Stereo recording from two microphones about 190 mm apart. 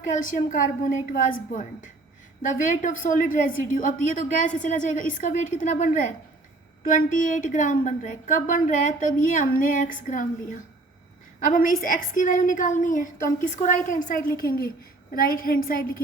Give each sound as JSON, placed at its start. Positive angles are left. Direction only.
{"t": 0.0, "sound": "a woman's voice", "side_deg": 45}